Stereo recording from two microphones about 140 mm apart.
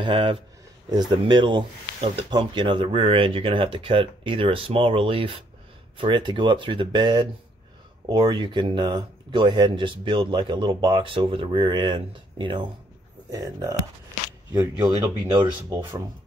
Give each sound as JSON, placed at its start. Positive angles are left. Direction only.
{"t": 0.0, "sound": "speech", "side_deg": -40}
{"t": 15.7, "sound": "speech", "side_deg": -15}